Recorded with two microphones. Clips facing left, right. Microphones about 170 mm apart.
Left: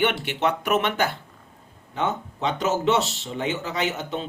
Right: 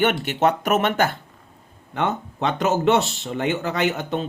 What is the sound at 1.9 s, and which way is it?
Speech, 60° right (ahead or behind).